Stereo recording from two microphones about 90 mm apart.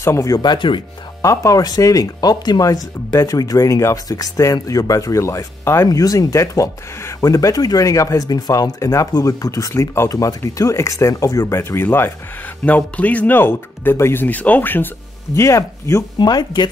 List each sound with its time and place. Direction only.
0.0 s speech: 35° left (ahead or behind)
0.4 s speech: 60° left (ahead or behind)
1.2 s speech: 35° left (ahead or behind)
15.3 s speech: 30° left (ahead or behind)
16.2 s speech: 50° left (ahead or behind)